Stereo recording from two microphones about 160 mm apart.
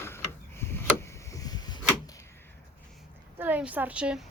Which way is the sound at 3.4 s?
10° right (ahead or behind).